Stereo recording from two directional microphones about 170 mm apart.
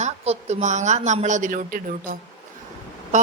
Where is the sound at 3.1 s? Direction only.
45° right (ahead or behind).